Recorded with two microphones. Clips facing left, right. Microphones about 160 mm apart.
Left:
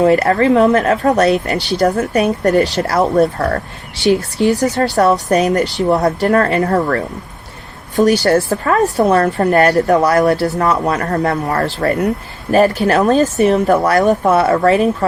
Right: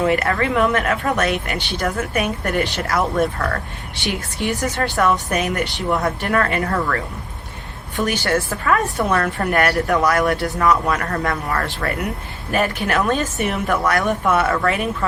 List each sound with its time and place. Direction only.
0.0 s speech: 35° left (ahead or behind)